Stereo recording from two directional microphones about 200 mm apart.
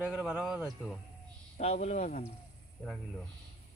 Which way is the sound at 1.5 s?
35° left (ahead or behind).